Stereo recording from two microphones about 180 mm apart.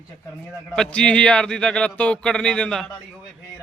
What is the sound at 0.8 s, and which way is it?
A man's voice, 5° left (ahead or behind).